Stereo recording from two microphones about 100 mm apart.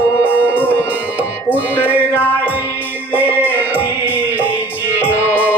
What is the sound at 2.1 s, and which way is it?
Music, 20° left (ahead or behind).